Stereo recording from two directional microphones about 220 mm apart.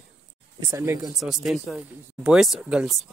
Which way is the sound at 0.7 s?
15° right (ahead or behind).